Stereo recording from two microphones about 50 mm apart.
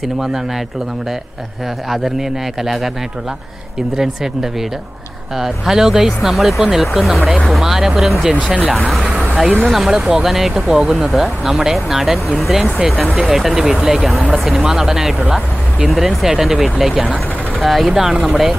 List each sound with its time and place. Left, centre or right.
1.9 s speech: centre
3.9 s speech: centre
7.6 s speech: centre
15.9 s speech: centre